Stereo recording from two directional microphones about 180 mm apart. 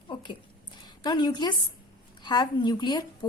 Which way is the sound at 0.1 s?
25° left (ahead or behind).